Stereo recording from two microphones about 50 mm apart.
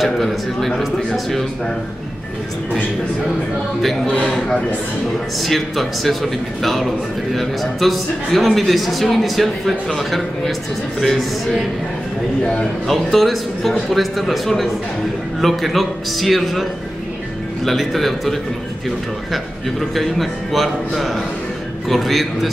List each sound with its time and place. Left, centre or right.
0.0 s a man's voice: centre
3.8 s a man's voice: centre
4.1 s a man's voice: centre
5.4 s a man's voice: centre
12.8 s a man's voice: centre
17.6 s a man's voice: centre